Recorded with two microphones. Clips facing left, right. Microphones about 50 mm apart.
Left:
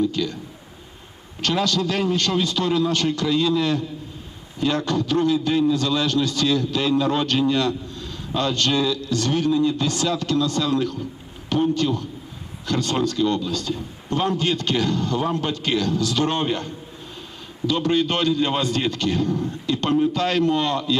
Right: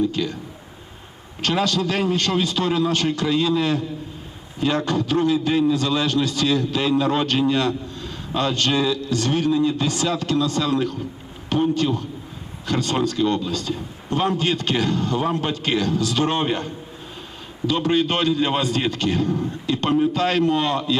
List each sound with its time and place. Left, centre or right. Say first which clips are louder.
0.1 s a sound: even; right
1.4 s a man's voice: right 1 dB; right
17.7 s speech: right 1 dB; right